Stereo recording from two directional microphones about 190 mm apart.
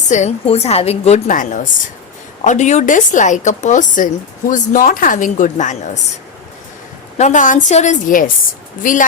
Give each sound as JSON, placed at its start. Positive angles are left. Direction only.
{"t": 0.1, "sound": "a woman's voice", "side_deg": 35}
{"t": 7.2, "sound": "a woman's voice", "side_deg": 40}